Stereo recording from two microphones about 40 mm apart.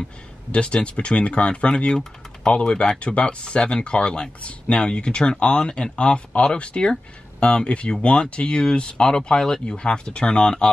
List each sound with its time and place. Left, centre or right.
0.5 s speech: left